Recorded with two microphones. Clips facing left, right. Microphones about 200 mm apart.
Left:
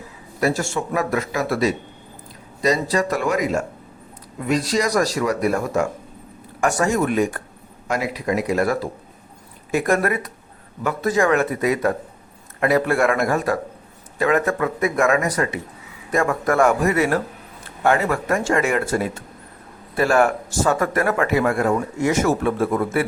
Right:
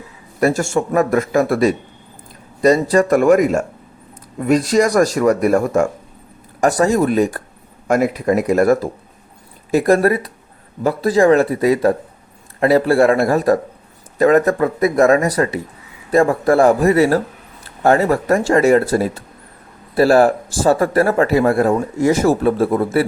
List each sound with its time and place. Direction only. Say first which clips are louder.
0.3 s speech: right 5 dB; 50° right (ahead or behind)
6.6 s speech: right 5 dB; 35° right (ahead or behind)
7.9 s speech: right 7 dB; 50° right (ahead or behind)
9.7 s speech: right 6 dB; 35° right (ahead or behind)